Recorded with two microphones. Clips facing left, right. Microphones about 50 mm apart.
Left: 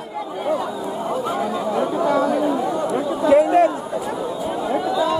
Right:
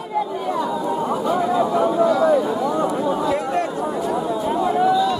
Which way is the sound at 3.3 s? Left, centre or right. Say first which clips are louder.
Left 8 dB; centre.